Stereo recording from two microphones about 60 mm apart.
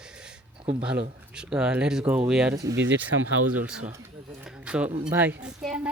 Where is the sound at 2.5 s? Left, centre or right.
Right.